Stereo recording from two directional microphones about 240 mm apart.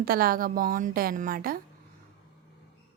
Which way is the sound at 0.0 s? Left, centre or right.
Right.